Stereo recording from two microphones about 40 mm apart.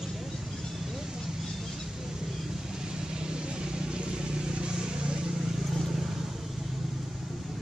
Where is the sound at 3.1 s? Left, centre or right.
Right.